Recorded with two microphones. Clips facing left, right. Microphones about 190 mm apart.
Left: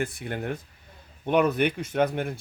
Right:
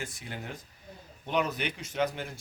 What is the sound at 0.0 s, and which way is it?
Speech, 60° left (ahead or behind).